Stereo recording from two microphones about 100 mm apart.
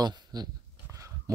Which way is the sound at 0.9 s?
30° right (ahead or behind).